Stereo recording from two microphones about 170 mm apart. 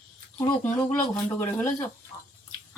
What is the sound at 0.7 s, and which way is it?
Speech, 10° left (ahead or behind).